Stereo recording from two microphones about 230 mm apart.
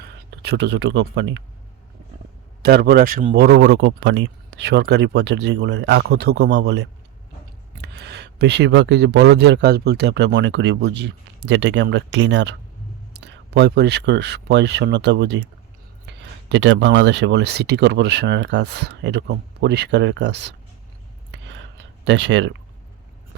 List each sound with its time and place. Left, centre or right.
0.0 s speech: right
2.6 s speech: right
21.3 s a sound: right